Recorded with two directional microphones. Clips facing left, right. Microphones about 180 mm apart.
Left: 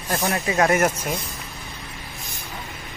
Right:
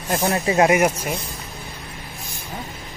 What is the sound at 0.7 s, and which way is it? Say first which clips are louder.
Speech: right 2 dB; 10° right (ahead or behind).